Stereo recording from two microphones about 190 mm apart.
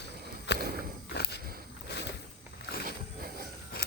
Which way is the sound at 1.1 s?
60° left (ahead or behind).